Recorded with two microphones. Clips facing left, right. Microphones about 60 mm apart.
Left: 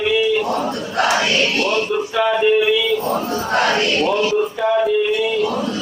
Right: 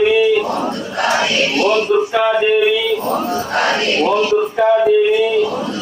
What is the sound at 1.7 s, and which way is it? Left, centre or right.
Battle cry, right.